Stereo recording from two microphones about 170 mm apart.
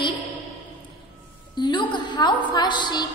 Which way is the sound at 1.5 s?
25° left (ahead or behind).